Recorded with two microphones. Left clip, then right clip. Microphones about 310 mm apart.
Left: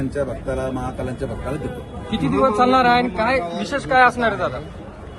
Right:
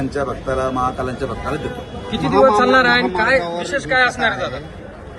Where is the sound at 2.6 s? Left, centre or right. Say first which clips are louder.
Right 2 dB; centre.